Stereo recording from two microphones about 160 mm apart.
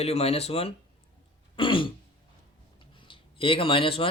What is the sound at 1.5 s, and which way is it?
Throat clearing, 30° left (ahead or behind).